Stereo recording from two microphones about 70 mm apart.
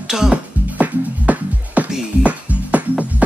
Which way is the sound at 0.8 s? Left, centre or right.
Right.